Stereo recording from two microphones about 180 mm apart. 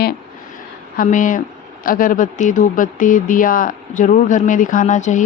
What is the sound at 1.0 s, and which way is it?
Speech, 45° left (ahead or behind).